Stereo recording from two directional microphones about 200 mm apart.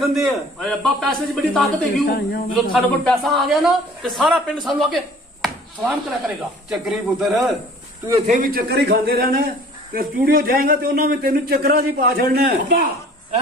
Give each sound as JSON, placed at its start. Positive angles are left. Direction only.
{"t": 0.1, "sound": "speech", "side_deg": 0}
{"t": 2.0, "sound": "speech", "side_deg": 50}
{"t": 2.5, "sound": "speech", "side_deg": 0}
{"t": 8.3, "sound": "a man's voice", "side_deg": -45}